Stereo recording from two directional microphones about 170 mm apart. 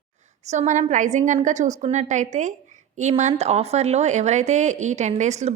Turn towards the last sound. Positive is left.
turn(degrees=-45)  # may be behind; listen again after turning